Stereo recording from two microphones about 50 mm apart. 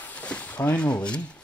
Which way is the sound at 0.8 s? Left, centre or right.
Left.